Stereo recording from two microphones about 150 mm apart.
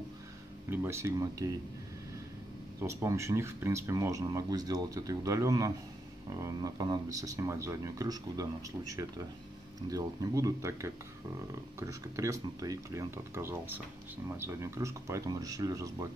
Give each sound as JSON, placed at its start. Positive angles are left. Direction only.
{"t": 0.7, "sound": "speech", "side_deg": -15}
{"t": 2.8, "sound": "speech", "side_deg": -20}
{"t": 12.2, "sound": "speech", "side_deg": -20}